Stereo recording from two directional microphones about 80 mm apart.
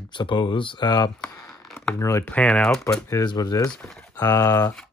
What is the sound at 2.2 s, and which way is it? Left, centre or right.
Speech, centre.